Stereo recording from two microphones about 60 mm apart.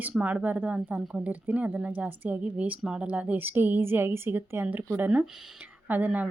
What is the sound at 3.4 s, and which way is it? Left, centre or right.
A woman's voice, right.